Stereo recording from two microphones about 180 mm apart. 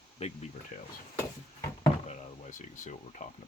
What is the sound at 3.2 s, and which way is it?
Speech, 45° left (ahead or behind).